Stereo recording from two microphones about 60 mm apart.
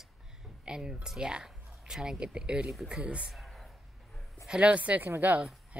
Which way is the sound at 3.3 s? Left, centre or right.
Centre.